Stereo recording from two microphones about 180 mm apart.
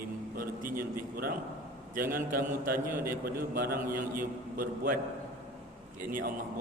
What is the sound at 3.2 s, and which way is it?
Speech, 55° right (ahead or behind).